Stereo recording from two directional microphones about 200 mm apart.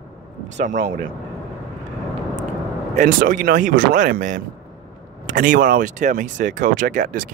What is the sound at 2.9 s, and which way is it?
Speech, 40° right (ahead or behind).